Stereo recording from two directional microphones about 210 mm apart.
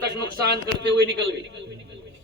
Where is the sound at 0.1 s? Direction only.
50° right (ahead or behind).